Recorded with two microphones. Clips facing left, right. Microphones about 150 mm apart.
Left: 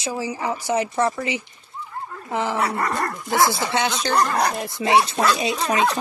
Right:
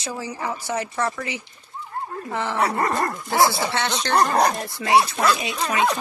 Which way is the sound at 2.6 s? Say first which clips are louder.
Right 1 dB; 30° right (ahead or behind).